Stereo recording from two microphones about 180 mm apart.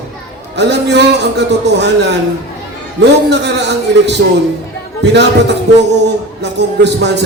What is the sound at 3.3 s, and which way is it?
Speech, 70° right (ahead or behind).